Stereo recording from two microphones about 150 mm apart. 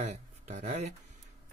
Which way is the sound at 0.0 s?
50° right (ahead or behind).